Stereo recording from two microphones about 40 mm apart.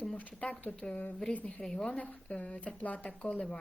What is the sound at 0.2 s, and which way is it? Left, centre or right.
Speech, left.